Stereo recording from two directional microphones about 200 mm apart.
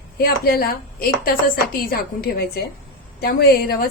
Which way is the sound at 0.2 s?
50° left (ahead or behind).